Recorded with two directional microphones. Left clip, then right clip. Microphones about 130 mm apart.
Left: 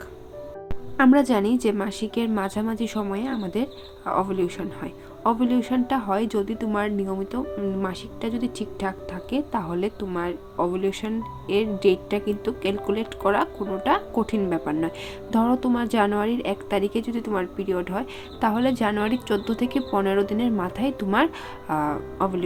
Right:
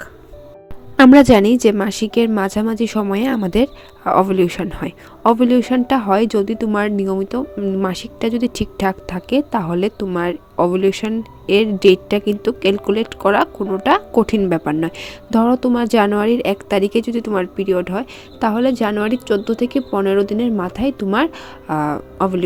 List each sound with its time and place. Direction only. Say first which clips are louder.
0.9 s speech: right 10 dB; 70° right (ahead or behind); by 3.1 s 45° right (ahead or behind)
3.1 s speech: right 10 dB; 70° right (ahead or behind); by 22.4 s 45° right (ahead or behind)